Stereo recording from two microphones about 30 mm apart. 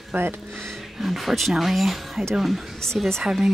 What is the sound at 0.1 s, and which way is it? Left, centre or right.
Speech, right.